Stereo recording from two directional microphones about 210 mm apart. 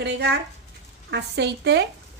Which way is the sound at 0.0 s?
55° right (ahead or behind).